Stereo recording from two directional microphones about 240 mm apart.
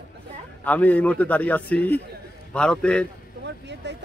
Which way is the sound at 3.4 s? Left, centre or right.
Right.